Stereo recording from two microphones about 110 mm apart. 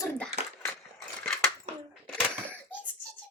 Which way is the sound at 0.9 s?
5° left (ahead or behind).